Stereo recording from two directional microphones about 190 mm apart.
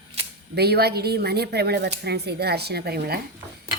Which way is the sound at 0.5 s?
60° right (ahead or behind).